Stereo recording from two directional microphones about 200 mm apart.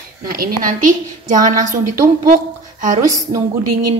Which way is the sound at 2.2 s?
40° right (ahead or behind).